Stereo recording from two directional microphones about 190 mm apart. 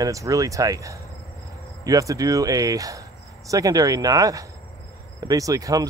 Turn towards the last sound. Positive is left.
turn(degrees=-20)  # may be behind; listen again after turning